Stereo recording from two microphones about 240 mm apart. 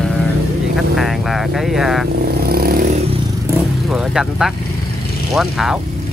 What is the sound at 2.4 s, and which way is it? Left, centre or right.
Vehicle, right.